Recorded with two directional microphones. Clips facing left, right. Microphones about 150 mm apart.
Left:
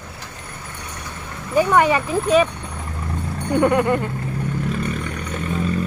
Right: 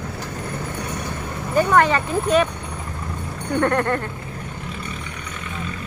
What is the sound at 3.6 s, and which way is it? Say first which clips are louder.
Speech: left 3 dB; 10° left (ahead or behind).